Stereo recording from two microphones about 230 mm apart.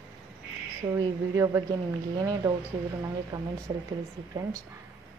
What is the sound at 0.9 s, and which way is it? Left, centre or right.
Speech, centre.